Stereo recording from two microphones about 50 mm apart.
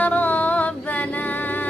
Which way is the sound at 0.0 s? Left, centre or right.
Left.